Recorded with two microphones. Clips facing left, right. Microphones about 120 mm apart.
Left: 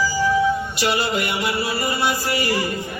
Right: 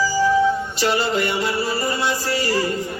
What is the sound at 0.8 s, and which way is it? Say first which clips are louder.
Music: right 2 dB; 5° left (ahead or behind).